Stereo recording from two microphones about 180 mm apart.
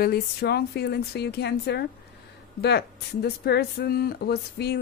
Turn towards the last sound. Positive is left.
turn(degrees=65)  # may be behind; listen again after turning